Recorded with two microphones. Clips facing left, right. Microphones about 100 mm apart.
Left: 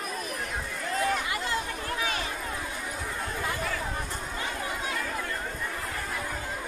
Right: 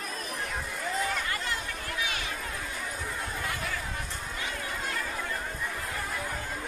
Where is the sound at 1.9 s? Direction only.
35° left (ahead or behind).